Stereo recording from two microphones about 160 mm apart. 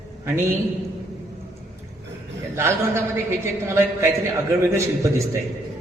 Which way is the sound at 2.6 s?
15° right (ahead or behind).